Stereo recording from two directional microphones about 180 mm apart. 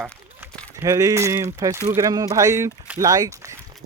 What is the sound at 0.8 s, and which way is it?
Speech, 20° right (ahead or behind).